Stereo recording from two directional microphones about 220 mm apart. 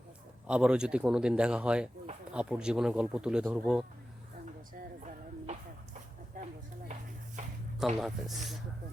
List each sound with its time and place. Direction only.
0.4 s speech: 5° right (ahead or behind)
6.4 s a sound: 40° right (ahead or behind)
7.8 s speech: centre (ahead or behind)